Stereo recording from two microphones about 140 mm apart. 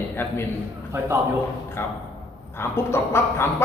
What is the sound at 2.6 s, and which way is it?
Speech, 20° left (ahead or behind).